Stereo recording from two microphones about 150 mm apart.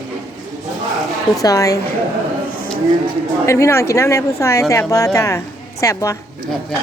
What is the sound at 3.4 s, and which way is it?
A woman's voice, 20° left (ahead or behind).